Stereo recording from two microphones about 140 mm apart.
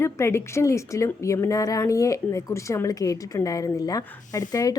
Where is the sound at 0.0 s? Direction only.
20° left (ahead or behind).